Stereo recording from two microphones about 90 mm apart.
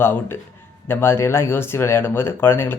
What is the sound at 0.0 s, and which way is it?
Speech, 25° left (ahead or behind).